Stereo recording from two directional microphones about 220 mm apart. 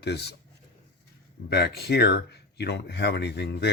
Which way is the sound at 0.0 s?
50° left (ahead or behind).